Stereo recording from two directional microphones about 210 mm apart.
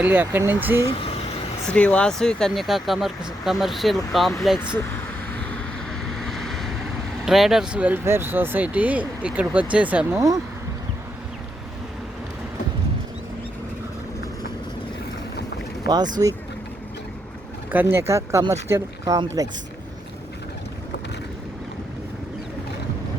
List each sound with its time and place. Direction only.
0.0 s speech: 10° right (ahead or behind)
0.9 s vehicle: 25° left (ahead or behind)
1.7 s speech: 5° left (ahead or behind)
6.1 s vehicle: centre (ahead or behind)
7.3 s speech: centre (ahead or behind)
16.2 s speech: 15° right (ahead or behind)
17.7 s speech: 10° right (ahead or behind)